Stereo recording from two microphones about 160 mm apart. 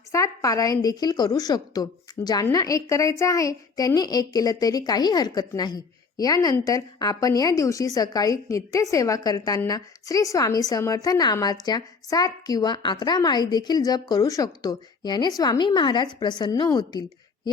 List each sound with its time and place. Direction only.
0.1 s a woman's voice: 20° left (ahead or behind)